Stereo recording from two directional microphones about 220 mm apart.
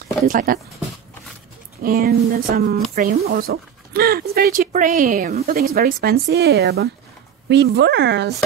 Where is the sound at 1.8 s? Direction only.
40° right (ahead or behind).